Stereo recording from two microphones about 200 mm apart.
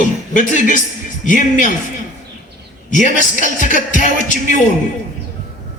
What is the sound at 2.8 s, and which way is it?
A man's voice, 40° left (ahead or behind).